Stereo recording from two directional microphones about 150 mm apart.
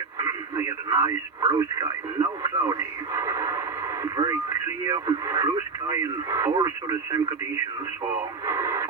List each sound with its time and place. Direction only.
0.2 s speech: 20° right (ahead or behind)
8.4 s speech: 20° right (ahead or behind)